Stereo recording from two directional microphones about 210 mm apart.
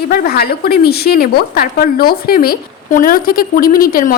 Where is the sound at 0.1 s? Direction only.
45° left (ahead or behind).